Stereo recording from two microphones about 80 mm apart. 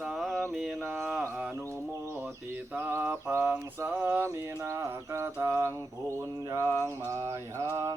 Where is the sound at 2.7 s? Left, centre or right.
Right.